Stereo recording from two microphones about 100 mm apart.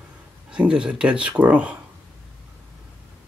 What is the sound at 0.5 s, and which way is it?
Speech, 10° right (ahead or behind).